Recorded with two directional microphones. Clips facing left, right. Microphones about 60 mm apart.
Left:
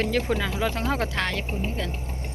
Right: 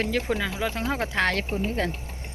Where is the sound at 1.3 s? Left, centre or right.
Right.